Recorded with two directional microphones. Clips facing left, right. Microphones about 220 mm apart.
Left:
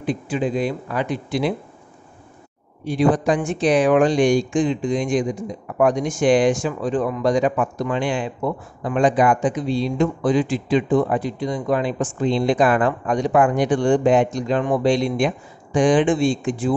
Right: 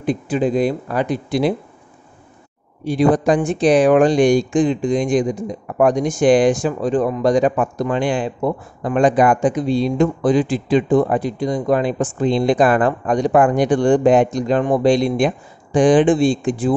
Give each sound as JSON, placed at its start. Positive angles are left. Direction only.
{"t": 0.0, "sound": "speech", "side_deg": -45}
{"t": 2.8, "sound": "speech", "side_deg": -35}